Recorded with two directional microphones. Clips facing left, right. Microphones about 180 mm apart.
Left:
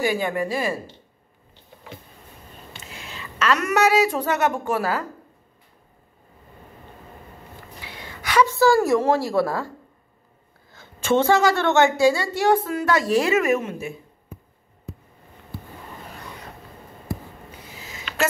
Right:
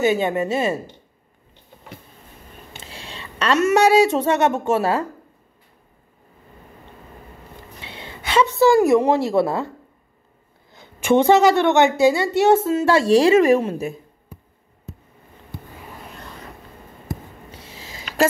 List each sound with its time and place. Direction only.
0.0 s speech: 25° right (ahead or behind)
2.8 s speech: 30° right (ahead or behind)
7.8 s a woman's voice: 25° right (ahead or behind)
10.7 s a woman's voice: 15° right (ahead or behind); by 14.4 s 35° right (ahead or behind)
17.6 s a sound: 35° right (ahead or behind)